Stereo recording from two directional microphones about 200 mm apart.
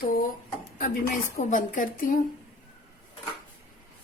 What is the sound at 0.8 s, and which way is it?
A woman's voice, 40° left (ahead or behind).